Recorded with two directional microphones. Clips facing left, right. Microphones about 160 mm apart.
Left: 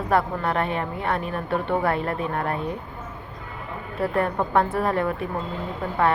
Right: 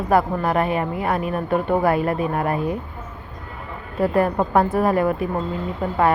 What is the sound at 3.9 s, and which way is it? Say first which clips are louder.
Speech: right 5 dB; 25° right (ahead or behind).